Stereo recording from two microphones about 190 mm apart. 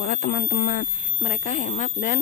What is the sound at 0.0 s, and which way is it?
Speech, 55° left (ahead or behind).